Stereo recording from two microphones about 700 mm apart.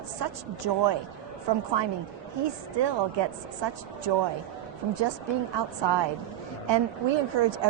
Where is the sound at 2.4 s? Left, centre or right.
Right.